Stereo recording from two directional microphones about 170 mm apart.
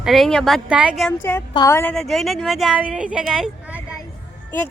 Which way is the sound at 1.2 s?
15° left (ahead or behind).